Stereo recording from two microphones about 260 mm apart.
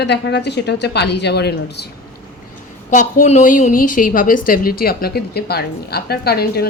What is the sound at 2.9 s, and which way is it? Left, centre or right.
A woman's voice, left.